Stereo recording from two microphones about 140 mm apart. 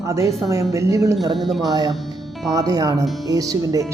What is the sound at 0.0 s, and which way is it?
A woman's voice, 20° right (ahead or behind).